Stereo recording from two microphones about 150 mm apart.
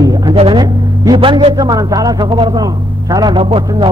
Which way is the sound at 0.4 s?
35° right (ahead or behind).